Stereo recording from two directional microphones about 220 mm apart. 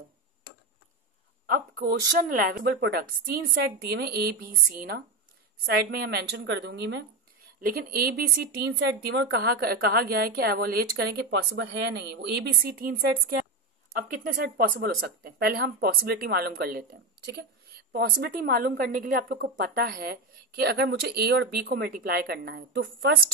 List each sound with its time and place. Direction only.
1.5 s speech: 45° right (ahead or behind)
13.9 s speech: 40° right (ahead or behind)